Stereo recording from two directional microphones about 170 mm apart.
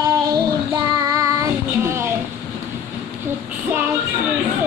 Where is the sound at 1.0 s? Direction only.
20° right (ahead or behind).